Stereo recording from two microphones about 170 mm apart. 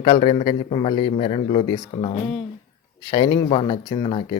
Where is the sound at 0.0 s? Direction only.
35° left (ahead or behind).